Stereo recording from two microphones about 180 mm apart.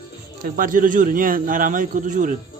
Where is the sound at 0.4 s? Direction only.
50° right (ahead or behind).